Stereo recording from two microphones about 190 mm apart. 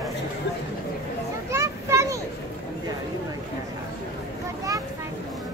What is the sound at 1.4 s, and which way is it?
Children playing, 15° right (ahead or behind).